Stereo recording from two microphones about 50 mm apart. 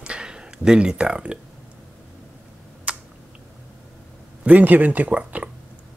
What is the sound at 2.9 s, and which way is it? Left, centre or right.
Typing, right.